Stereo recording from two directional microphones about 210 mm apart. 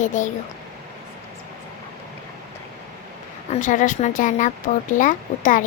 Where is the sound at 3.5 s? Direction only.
35° left (ahead or behind).